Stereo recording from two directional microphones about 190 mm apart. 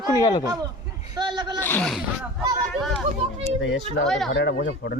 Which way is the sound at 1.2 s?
20° right (ahead or behind).